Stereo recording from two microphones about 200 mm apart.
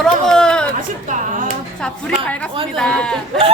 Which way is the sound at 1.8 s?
5° left (ahead or behind).